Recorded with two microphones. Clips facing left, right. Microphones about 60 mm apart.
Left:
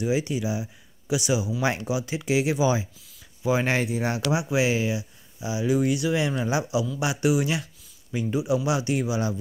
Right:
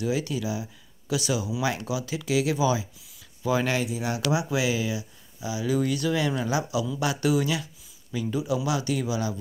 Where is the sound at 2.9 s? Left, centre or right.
Centre.